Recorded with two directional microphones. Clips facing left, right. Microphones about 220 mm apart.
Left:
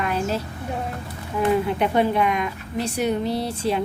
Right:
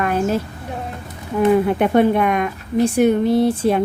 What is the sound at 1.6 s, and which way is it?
A woman's voice, 50° right (ahead or behind).